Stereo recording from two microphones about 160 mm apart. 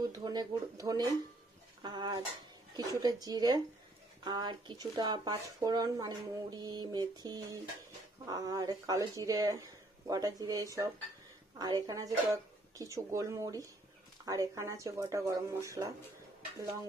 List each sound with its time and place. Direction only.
0.1 s speech: 25° right (ahead or behind)